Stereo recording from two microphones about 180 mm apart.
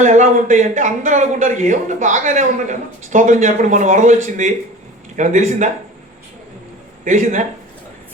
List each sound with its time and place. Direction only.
0.0 s a man's voice: 40° right (ahead or behind)
7.0 s speech: 45° right (ahead or behind)